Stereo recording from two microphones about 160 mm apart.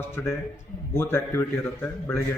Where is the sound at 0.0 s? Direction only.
15° left (ahead or behind).